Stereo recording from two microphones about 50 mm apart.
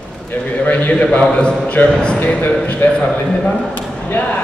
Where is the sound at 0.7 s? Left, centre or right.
Left.